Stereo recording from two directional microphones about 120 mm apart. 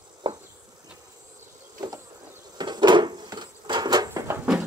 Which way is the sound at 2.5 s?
35° right (ahead or behind).